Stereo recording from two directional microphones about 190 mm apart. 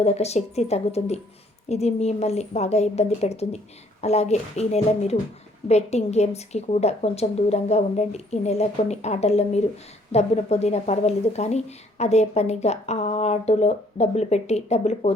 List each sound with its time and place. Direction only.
0.0 s a woman's voice: 35° left (ahead or behind)